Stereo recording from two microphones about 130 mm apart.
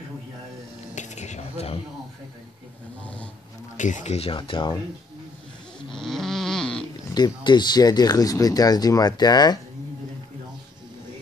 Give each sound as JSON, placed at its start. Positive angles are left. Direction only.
{"t": 0.9, "sound": "dishes", "side_deg": 65}
{"t": 3.7, "sound": "speech", "side_deg": 70}
{"t": 5.9, "sound": "snoring", "side_deg": 5}
{"t": 7.2, "sound": "speech", "side_deg": 35}